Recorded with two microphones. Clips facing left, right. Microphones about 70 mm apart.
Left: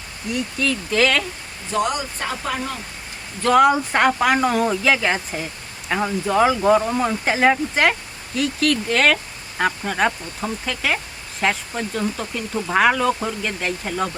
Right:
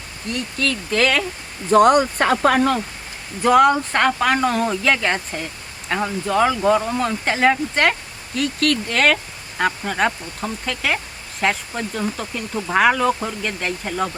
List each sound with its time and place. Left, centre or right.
0.3 s speech: centre
1.7 s speech: right
3.4 s speech: centre
3.7 s speech: centre